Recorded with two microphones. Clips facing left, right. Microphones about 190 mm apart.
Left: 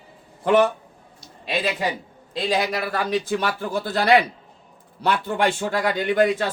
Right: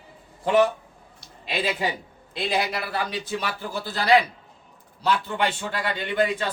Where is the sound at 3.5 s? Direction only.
55° left (ahead or behind).